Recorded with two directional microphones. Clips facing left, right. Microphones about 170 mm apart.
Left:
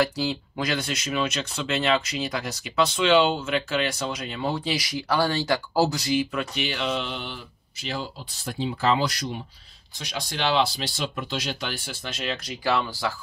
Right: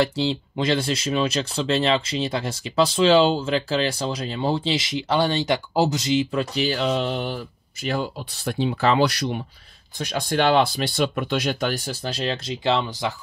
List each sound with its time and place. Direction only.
0.0 s speech: 25° right (ahead or behind)
6.5 s speech: 40° right (ahead or behind); by 9.4 s 70° right (ahead or behind)
9.9 s speech: 50° right (ahead or behind); by 13.1 s 20° right (ahead or behind)